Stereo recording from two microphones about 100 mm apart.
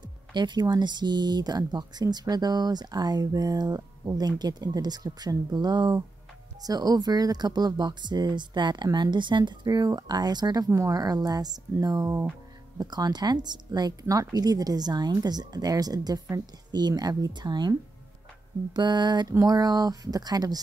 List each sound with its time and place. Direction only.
0.0 s speech: 50° right (ahead or behind)